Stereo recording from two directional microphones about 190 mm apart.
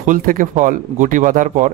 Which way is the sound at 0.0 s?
45° right (ahead or behind).